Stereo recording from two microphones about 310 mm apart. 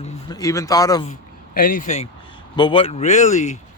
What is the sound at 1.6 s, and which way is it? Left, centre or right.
Speech, left.